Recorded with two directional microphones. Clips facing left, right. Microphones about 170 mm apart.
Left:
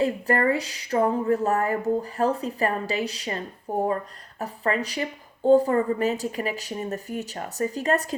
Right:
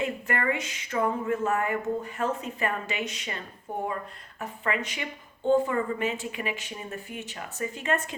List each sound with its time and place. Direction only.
0.0 s speech: 35° left (ahead or behind)